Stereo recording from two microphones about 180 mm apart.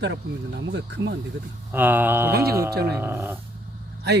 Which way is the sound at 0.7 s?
80° right.